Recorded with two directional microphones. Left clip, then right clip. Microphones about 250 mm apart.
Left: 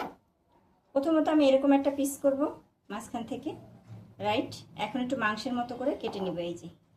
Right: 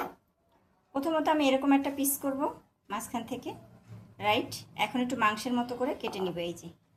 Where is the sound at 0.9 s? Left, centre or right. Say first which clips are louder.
Left 2 dB; right.